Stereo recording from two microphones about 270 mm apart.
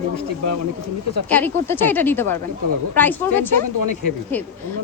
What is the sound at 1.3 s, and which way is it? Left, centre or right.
Speech, centre.